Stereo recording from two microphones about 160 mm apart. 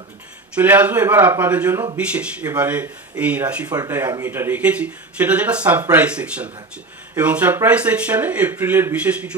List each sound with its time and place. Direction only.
0.6 s speech: 10° right (ahead or behind)
3.6 s speech: 25° right (ahead or behind)